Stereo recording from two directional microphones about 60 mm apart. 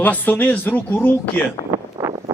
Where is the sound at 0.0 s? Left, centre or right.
Left.